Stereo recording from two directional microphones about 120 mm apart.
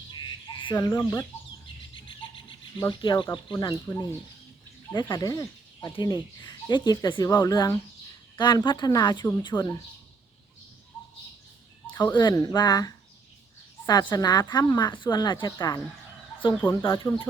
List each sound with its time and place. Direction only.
0.1 s frog: 40° left (ahead or behind)
0.8 s speech: 30° left (ahead or behind)
2.9 s a woman's voice: 40° left (ahead or behind)
3.8 s speech: 25° left (ahead or behind)
4.9 s a woman's voice: 40° left (ahead or behind)
10.9 s bird: 10° left (ahead or behind)
11.9 s a woman's voice: 35° left (ahead or behind)
16.6 s speech: 20° left (ahead or behind)